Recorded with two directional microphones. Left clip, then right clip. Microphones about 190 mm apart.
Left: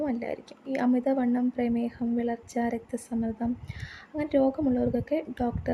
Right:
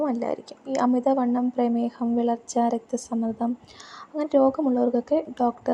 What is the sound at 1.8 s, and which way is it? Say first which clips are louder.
A woman's voice: right 5 dB; 10° right (ahead or behind).